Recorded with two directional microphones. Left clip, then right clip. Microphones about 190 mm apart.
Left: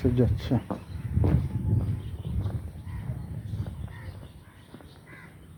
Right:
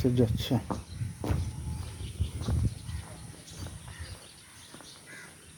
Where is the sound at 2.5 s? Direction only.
10° right (ahead or behind).